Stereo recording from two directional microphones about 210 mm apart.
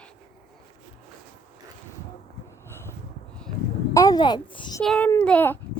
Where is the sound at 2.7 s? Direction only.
10° left (ahead or behind).